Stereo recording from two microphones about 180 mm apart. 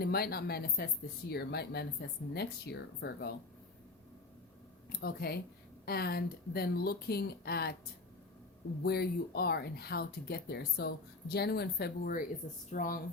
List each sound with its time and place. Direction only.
0.0 s speech: 60° left (ahead or behind)
4.9 s speech: 60° left (ahead or behind)
8.8 s speech: 60° left (ahead or behind)